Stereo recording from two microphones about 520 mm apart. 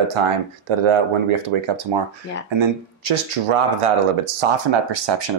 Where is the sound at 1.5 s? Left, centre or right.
Right.